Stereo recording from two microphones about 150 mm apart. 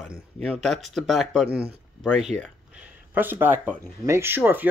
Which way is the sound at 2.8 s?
10° right (ahead or behind).